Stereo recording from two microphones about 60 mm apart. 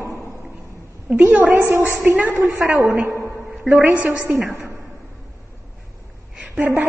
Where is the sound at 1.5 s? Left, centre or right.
Right.